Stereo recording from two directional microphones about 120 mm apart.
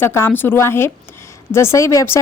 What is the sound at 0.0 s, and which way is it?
Speech, 20° left (ahead or behind).